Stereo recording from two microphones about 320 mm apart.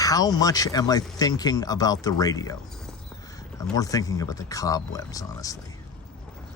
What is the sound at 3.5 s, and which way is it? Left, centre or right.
A man's voice, centre.